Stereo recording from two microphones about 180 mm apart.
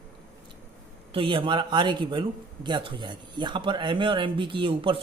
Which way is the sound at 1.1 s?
30° right (ahead or behind).